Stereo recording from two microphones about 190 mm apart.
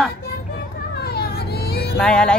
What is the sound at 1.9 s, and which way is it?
Music, 5° left (ahead or behind).